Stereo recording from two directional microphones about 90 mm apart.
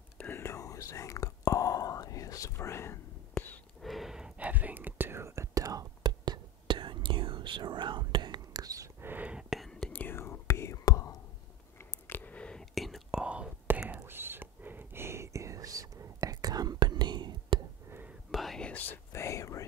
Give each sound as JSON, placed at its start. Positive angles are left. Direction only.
{"t": 0.2, "sound": "whispering", "side_deg": 25}
{"t": 3.3, "sound": "a sound", "side_deg": 15}
{"t": 3.8, "sound": "whispering", "side_deg": 0}
{"t": 9.0, "sound": "whispering", "side_deg": -20}
{"t": 9.7, "sound": "whispering", "side_deg": 10}
{"t": 10.0, "sound": "whispering", "side_deg": 25}
{"t": 11.8, "sound": "whispering", "side_deg": 20}
{"t": 13.2, "sound": "whispering", "side_deg": -10}
{"t": 14.0, "sound": "whispering", "side_deg": -25}
{"t": 18.3, "sound": "whispering", "side_deg": 5}
{"t": 18.7, "sound": "whispering", "side_deg": 20}
{"t": 19.1, "sound": "whispering", "side_deg": 35}